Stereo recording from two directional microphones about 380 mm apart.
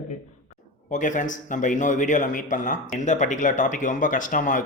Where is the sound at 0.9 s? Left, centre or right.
Centre.